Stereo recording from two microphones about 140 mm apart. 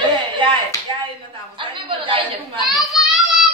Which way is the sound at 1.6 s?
35° right (ahead or behind).